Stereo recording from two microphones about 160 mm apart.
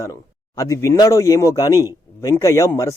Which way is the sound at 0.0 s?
20° left (ahead or behind).